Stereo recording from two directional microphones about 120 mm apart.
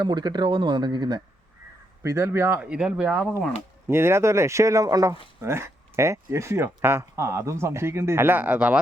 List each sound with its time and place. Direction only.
0.0 s speech: 35° right (ahead or behind)
2.0 s speech: 20° right (ahead or behind)
2.6 s speech: 5° right (ahead or behind)
3.8 s speech: 20° right (ahead or behind)
5.4 s speech: 20° right (ahead or behind)